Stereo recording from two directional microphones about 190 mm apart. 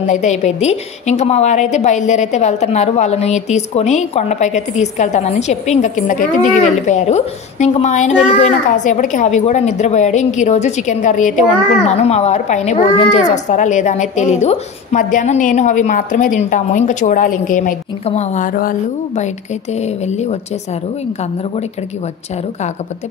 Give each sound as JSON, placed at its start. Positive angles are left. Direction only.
{"t": 0.0, "sound": "a woman's voice", "side_deg": 40}